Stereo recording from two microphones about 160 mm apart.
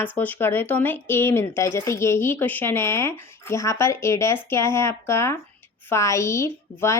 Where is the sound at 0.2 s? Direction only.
10° left (ahead or behind).